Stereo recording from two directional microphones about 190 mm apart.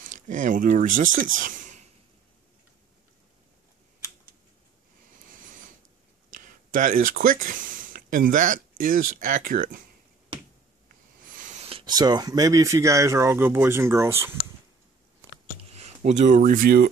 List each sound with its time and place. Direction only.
0.1 s speech: 40° right (ahead or behind)
6.3 s speech: 45° right (ahead or behind)
11.3 s sneeze: 40° right (ahead or behind)
11.7 s speech: 20° right (ahead or behind)
15.7 s speech: 35° right (ahead or behind); by 16.9 s 50° right (ahead or behind)